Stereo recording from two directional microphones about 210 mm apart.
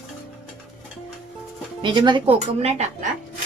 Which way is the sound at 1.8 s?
20° right (ahead or behind).